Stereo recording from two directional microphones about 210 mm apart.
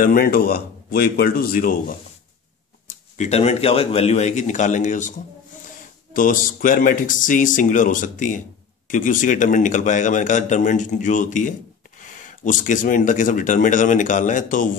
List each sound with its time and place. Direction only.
0.0 s speech: 45° left (ahead or behind)
3.2 s a man's voice: 30° left (ahead or behind)
6.1 s a man's voice: 40° left (ahead or behind)